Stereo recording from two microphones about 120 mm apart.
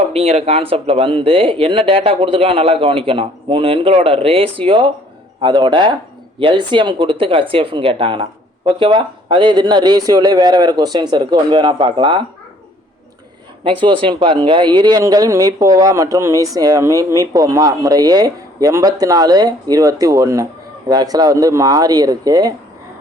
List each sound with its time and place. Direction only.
0.1 s speech: 60° right (ahead or behind)
13.8 s speech: 45° right (ahead or behind)